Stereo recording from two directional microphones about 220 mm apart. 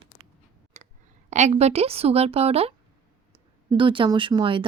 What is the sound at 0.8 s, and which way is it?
Clicking, 30° right (ahead or behind).